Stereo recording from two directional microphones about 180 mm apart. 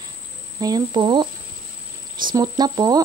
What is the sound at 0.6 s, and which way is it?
Speech, 20° right (ahead or behind).